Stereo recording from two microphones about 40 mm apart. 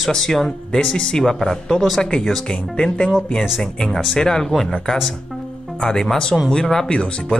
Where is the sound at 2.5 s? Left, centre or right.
Left.